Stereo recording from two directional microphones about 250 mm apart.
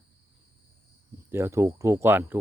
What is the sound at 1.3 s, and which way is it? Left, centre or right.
Speech, centre.